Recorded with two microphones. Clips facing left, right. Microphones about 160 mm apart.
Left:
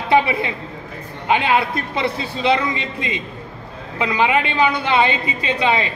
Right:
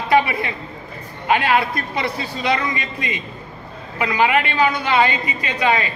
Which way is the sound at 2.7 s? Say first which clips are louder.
Left 1 dB; 25° left (ahead or behind).